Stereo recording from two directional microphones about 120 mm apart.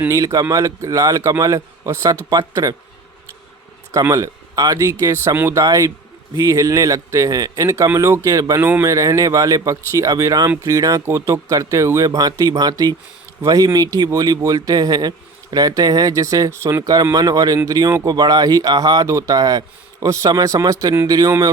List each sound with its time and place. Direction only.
0.1 s speech: 25° right (ahead or behind)
3.9 s speech: 25° right (ahead or behind)